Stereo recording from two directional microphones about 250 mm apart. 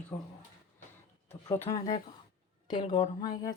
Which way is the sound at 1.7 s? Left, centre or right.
Left.